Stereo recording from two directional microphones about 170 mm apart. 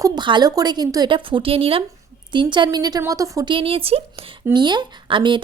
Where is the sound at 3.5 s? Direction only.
35° right (ahead or behind).